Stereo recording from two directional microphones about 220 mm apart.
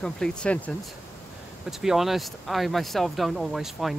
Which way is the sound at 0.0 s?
5° left (ahead or behind).